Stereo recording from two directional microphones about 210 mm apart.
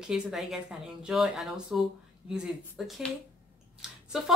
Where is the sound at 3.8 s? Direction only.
Centre (ahead or behind).